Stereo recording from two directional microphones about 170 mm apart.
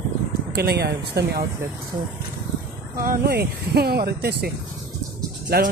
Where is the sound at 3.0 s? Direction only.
65° right (ahead or behind).